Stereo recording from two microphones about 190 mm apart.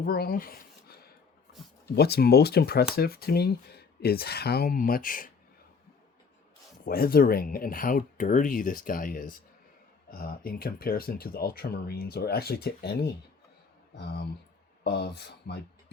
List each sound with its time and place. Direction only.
0.0 s speech: 50° left (ahead or behind)
2.0 s speech: 55° left (ahead or behind)
6.8 s speech: 50° left (ahead or behind)